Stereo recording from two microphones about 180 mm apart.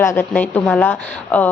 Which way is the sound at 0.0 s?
15° left (ahead or behind).